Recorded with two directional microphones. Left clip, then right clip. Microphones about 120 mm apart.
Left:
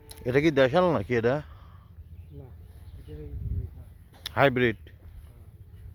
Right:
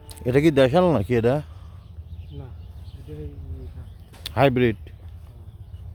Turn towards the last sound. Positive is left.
turn(degrees=-25)  # may be behind; listen again after turning